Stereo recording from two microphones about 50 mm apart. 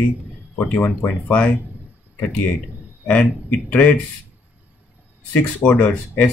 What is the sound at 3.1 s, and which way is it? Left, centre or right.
Speech, left.